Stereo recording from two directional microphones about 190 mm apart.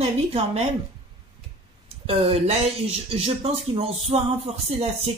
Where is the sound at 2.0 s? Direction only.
30° right (ahead or behind).